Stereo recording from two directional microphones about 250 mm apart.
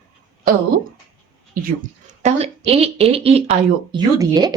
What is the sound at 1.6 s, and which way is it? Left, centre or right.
A woman's voice, right.